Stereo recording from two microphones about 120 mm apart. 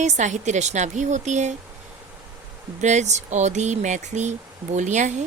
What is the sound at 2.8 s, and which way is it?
Speech, 80° right.